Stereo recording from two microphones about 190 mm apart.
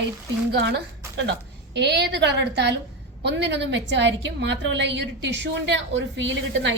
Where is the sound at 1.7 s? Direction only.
65° right (ahead or behind).